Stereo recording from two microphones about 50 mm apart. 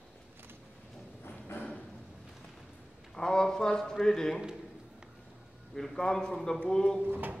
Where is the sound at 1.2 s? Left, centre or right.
Left.